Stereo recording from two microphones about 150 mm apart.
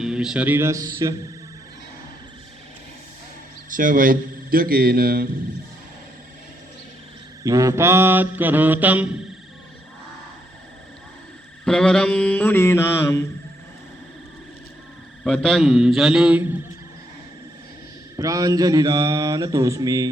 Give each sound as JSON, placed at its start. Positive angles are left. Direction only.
{"t": 0.0, "sound": "speech", "side_deg": -5}
{"t": 3.7, "sound": "a man's voice", "side_deg": -65}
{"t": 7.4, "sound": "mantra", "side_deg": -20}
{"t": 11.6, "sound": "mantra", "side_deg": 5}
{"t": 15.2, "sound": "a man's voice", "side_deg": 5}
{"t": 18.2, "sound": "mantra", "side_deg": -25}